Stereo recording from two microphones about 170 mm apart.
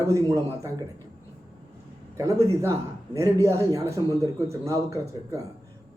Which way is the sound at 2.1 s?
15° right (ahead or behind).